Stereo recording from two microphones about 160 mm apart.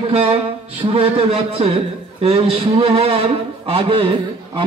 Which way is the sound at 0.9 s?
35° right (ahead or behind).